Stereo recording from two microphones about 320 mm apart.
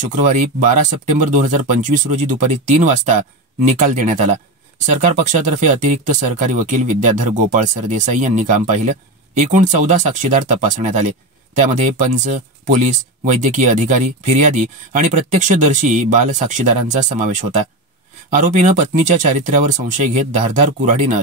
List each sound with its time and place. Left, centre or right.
0.1 s speech: right